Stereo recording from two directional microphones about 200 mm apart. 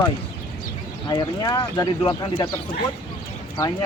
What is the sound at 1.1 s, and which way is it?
Speech, 20° left (ahead or behind).